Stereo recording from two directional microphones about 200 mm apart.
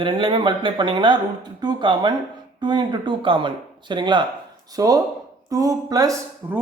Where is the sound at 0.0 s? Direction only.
25° right (ahead or behind).